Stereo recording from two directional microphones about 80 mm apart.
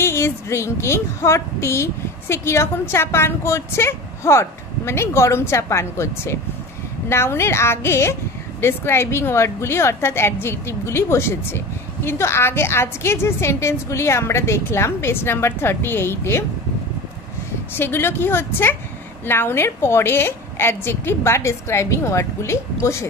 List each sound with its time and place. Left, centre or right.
0.0 s speech: left
17.7 s a woman's voice: left